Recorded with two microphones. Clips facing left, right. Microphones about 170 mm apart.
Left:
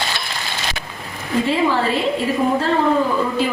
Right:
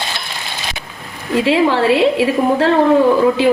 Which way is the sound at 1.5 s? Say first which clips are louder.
Right 7 dB; 75° right (ahead or behind).